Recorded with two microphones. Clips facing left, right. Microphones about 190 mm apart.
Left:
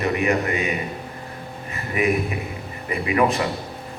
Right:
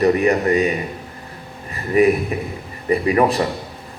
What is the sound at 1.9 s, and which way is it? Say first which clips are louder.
A man's voice: right 7 dB; 35° right (ahead or behind).